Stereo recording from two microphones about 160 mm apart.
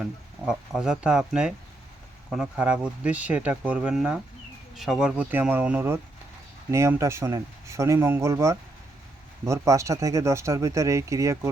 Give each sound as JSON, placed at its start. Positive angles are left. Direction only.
{"t": 0.0, "sound": "speech", "side_deg": -5}